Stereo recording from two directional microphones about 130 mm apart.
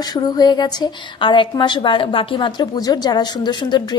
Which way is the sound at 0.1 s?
30° left (ahead or behind).